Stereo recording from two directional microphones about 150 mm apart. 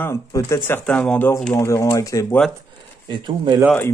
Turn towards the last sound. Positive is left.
turn(degrees=-30)  # may be behind; listen again after turning